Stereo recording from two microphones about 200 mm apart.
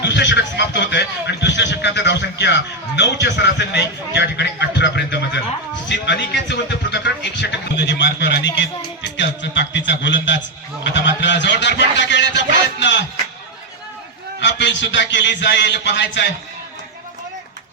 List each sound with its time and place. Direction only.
0.0 s speech: 60° left (ahead or behind)
14.4 s speech: 65° left (ahead or behind)